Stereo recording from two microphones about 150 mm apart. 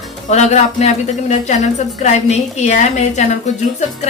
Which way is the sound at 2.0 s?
50° left (ahead or behind).